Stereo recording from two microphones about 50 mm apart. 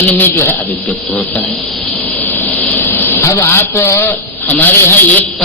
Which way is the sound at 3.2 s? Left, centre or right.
Left.